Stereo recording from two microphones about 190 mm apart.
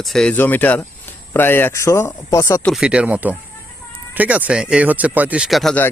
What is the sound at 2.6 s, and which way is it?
Speech, 5° right (ahead or behind).